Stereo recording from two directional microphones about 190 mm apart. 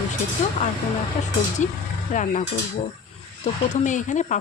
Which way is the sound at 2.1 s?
40° left (ahead or behind).